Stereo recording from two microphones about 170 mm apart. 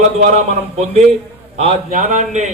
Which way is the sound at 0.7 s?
40° right (ahead or behind).